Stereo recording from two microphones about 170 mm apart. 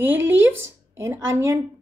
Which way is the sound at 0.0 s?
10° right (ahead or behind).